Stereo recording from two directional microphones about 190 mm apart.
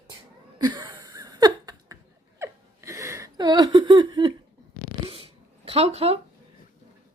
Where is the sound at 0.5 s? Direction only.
25° right (ahead or behind).